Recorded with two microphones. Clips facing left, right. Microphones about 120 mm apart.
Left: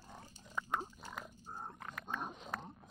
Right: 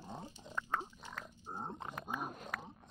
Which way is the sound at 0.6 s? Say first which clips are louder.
Even; 5° left (ahead or behind).